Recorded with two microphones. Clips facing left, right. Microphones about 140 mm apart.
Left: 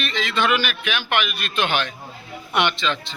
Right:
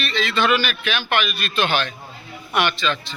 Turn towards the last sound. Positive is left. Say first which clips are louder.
# right 1 dB
turn(degrees=20)  # may be behind; listen again after turning